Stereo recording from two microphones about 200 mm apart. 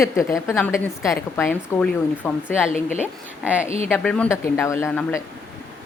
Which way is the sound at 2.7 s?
40° left (ahead or behind).